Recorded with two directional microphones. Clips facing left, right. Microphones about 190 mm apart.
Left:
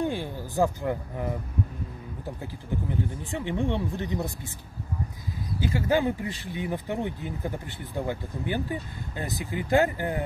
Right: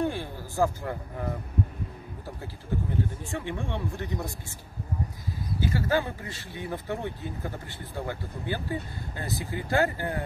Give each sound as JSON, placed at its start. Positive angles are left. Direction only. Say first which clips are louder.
{"t": 0.0, "sound": "a man's voice", "louder": "left 1 dB", "side_deg": 15}
{"t": 3.3, "sound": "speech", "louder": "left 5 dB", "side_deg": 20}
{"t": 5.6, "sound": "speech", "louder": "left 2 dB", "side_deg": 15}